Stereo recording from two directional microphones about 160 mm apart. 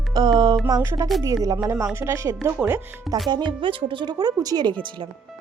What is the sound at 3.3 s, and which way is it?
Speech, 30° right (ahead or behind).